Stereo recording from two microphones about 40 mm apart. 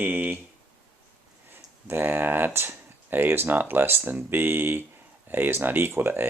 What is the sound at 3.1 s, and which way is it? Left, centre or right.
Speech, right.